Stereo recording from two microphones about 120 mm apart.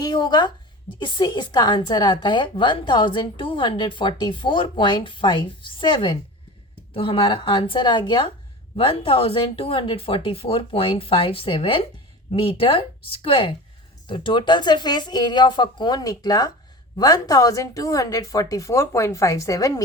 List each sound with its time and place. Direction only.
0.0 s a woman's voice: 35° left (ahead or behind)